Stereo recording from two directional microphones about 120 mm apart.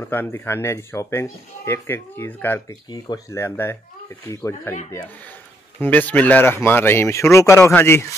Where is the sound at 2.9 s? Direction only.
25° left (ahead or behind).